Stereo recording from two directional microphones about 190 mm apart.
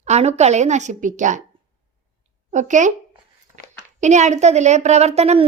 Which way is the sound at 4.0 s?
40° right (ahead or behind).